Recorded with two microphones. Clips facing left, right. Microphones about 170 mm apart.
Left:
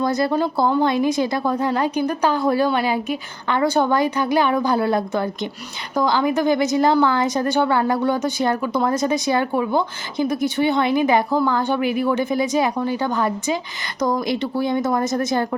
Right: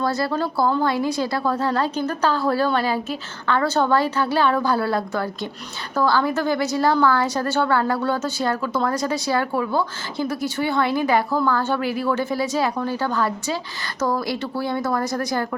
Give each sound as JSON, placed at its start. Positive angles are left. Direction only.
{"t": 0.0, "sound": "a woman's voice", "side_deg": 20}